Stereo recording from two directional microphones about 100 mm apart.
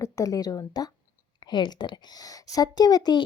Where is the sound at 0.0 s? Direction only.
35° left (ahead or behind).